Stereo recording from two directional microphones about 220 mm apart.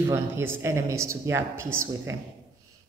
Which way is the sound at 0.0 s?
10° right (ahead or behind).